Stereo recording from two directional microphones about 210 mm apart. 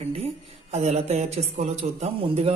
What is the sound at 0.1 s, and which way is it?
Speech, 30° right (ahead or behind).